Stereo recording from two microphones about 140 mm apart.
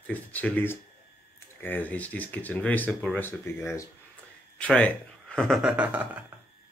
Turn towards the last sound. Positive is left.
turn(degrees=-10)  # may be behind; listen again after turning